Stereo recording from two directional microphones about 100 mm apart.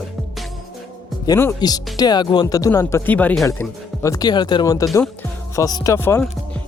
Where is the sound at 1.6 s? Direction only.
45° left (ahead or behind).